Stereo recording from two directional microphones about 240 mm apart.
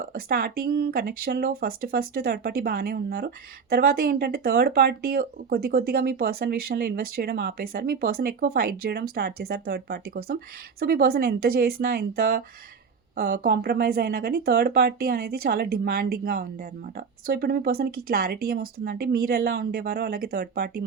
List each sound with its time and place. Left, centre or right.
0.0 s speech: right